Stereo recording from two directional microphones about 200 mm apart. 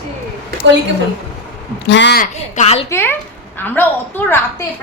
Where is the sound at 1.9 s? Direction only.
60° left (ahead or behind).